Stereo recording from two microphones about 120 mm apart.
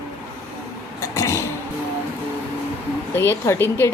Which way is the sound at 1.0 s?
25° left (ahead or behind).